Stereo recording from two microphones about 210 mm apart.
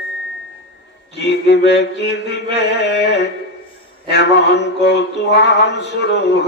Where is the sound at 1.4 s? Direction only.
55° left (ahead or behind).